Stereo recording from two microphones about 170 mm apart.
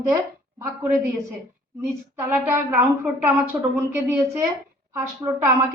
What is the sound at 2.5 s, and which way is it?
Speech, 15° right (ahead or behind).